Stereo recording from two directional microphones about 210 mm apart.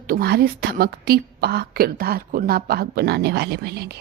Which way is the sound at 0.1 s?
45° right (ahead or behind).